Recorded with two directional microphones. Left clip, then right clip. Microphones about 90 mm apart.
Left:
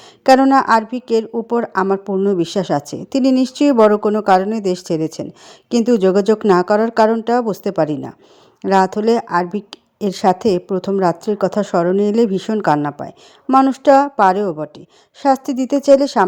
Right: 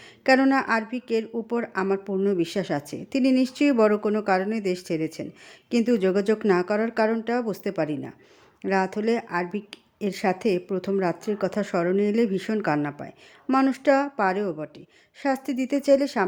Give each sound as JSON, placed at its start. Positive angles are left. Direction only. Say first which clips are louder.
{"t": 0.5, "sound": "a woman's voice", "louder": "left 11 dB", "side_deg": 50}
{"t": 13.5, "sound": "a woman's voice", "louder": "left 10 dB", "side_deg": 40}